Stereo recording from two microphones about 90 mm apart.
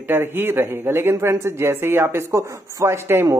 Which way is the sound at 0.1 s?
25° right (ahead or behind).